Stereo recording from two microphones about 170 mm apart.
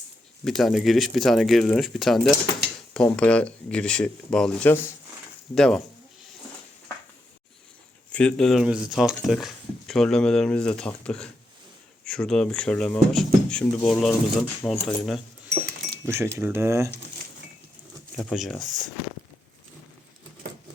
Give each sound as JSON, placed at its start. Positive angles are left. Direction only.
{"t": 0.4, "sound": "speech", "side_deg": 0}
{"t": 8.1, "sound": "speech", "side_deg": 5}
{"t": 16.0, "sound": "speech", "side_deg": -15}
{"t": 18.2, "sound": "speech", "side_deg": 0}